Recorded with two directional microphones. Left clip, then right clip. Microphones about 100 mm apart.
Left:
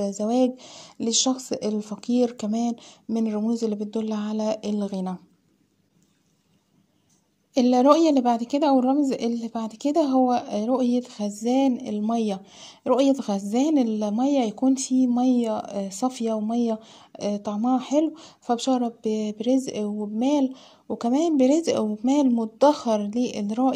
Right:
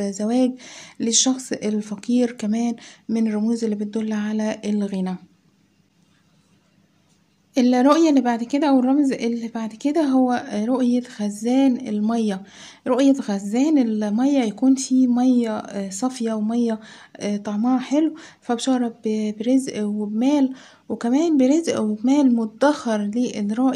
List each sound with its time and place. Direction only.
0.0 s speech: 25° left (ahead or behind)
7.5 s speech: 40° left (ahead or behind)
21.0 s speech: 35° left (ahead or behind)